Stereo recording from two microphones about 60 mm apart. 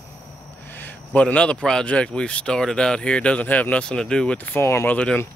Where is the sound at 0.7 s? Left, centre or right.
Left.